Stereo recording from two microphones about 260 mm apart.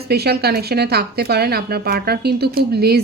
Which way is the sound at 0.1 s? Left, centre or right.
Right.